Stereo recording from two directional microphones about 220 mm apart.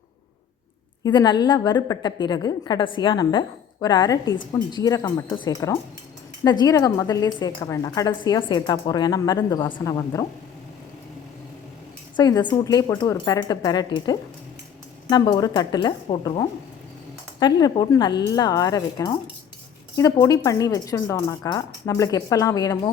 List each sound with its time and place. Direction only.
1.0 s a woman's voice: 20° left (ahead or behind)
12.1 s a woman's voice: 20° left (ahead or behind)